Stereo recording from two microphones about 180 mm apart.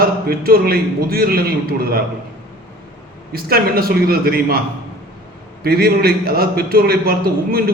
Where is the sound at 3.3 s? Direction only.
55° right (ahead or behind).